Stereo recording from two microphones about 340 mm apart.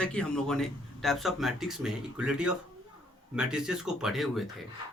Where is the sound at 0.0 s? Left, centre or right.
Centre.